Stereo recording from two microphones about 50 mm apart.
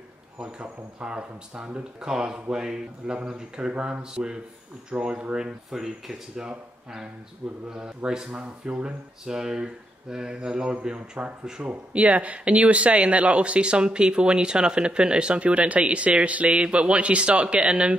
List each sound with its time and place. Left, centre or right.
0.4 s speech: centre
7.7 s speech: centre
11.7 s speech: right